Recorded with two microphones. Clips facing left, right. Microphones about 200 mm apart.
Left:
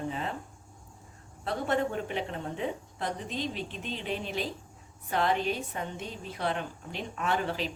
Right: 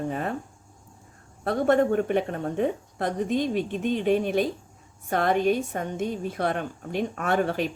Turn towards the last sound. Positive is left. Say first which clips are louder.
# right 6 dB
turn(degrees=-55)  # may be behind; listen again after turning